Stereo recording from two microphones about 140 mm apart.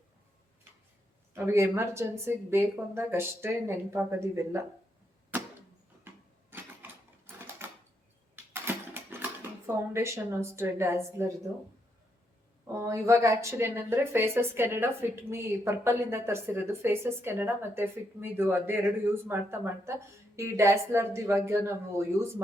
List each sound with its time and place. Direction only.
1.3 s speech: 15° right (ahead or behind)
6.1 s sewing machine: 15° right (ahead or behind)
8.6 s a sound: 15° right (ahead or behind)
12.8 s speech: 20° right (ahead or behind)